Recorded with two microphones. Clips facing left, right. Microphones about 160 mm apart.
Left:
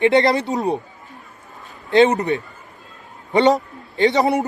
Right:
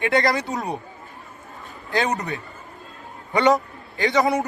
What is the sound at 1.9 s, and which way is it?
A woman's voice, 25° left (ahead or behind).